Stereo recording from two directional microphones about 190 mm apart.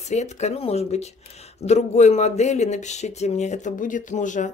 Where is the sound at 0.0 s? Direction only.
35° left (ahead or behind).